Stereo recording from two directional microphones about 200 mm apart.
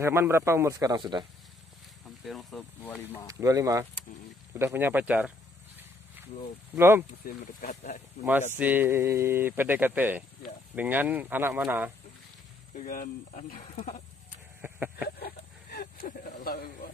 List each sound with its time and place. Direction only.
0.0 s speech: 10° right (ahead or behind)
2.0 s speech: centre (ahead or behind)
3.3 s speech: 15° right (ahead or behind)
6.7 s speech: 10° right (ahead or behind)
7.2 s speech: 35° left (ahead or behind)
8.5 s speech: 10° right (ahead or behind)
12.7 s speech: 40° left (ahead or behind)
14.6 s a sound: 10° right (ahead or behind)
15.0 s a sound: 55° left (ahead or behind)